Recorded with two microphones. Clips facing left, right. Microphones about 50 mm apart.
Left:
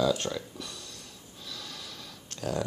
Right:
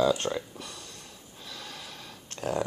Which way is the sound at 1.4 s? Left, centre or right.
Right.